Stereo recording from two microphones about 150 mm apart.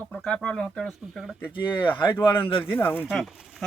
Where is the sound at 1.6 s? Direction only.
35° left (ahead or behind).